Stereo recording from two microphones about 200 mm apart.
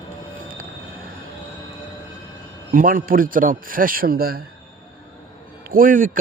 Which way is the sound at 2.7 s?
45° right (ahead or behind).